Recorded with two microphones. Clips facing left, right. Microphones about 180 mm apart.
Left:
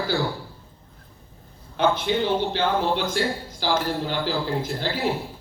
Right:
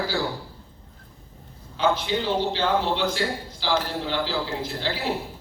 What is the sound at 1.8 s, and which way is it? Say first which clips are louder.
A man's voice: left 2 dB; 55° left (ahead or behind).